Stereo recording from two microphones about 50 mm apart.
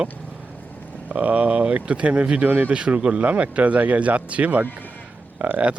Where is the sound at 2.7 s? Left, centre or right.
Centre.